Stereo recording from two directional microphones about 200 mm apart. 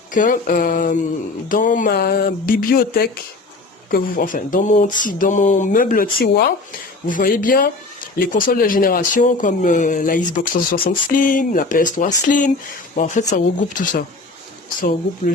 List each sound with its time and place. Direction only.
0.1 s speech: 40° left (ahead or behind)